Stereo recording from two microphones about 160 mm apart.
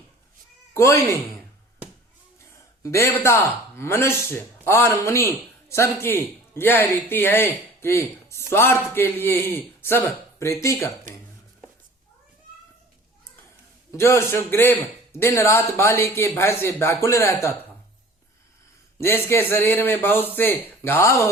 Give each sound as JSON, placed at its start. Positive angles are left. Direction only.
{"t": 0.7, "sound": "speech", "side_deg": 15}
{"t": 2.4, "sound": "a man's voice", "side_deg": 20}
{"t": 13.9, "sound": "a man's voice", "side_deg": 15}
{"t": 18.9, "sound": "a man's voice", "side_deg": 15}